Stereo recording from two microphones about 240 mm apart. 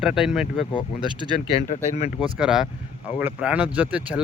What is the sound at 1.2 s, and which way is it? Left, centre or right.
Speech, left.